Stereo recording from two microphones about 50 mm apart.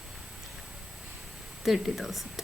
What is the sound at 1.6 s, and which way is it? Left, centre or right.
Speech, centre.